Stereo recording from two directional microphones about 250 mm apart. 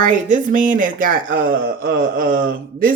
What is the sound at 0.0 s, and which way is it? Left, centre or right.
Speech, right.